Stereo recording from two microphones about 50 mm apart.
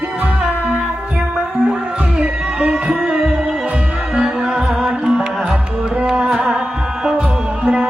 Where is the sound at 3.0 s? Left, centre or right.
Centre.